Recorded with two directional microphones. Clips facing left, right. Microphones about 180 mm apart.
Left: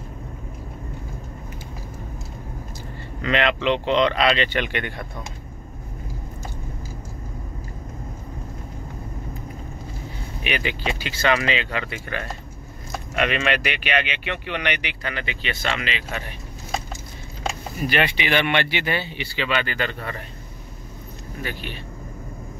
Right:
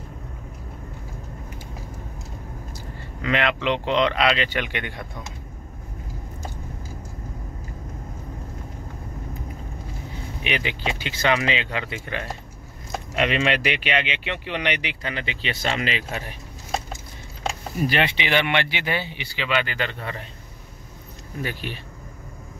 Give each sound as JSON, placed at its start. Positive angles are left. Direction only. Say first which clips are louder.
{"t": 3.2, "sound": "speech", "louder": "left 2 dB", "side_deg": -10}
{"t": 10.4, "sound": "speech", "louder": "left 1 dB", "side_deg": -20}
{"t": 15.6, "sound": "speech", "louder": "right 3 dB", "side_deg": -40}
{"t": 17.8, "sound": "speech", "louder": "left 1 dB", "side_deg": -25}